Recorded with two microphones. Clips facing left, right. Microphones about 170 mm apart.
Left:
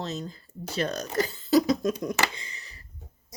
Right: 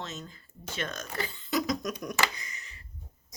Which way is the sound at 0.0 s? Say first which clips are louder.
Left 7 dB; 35° left (ahead or behind).